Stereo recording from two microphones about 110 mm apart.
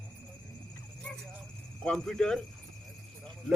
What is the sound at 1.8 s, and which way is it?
Speech, 5° left (ahead or behind).